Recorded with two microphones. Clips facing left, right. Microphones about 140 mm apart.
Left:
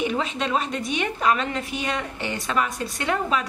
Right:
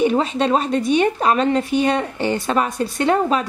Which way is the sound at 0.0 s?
35° right (ahead or behind).